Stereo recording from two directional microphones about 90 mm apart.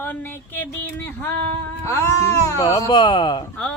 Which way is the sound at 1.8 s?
30° left (ahead or behind).